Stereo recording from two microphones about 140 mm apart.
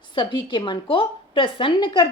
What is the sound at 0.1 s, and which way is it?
Speech, 35° left (ahead or behind).